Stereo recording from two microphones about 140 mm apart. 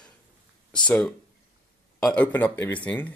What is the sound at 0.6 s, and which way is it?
Speech, 10° left (ahead or behind).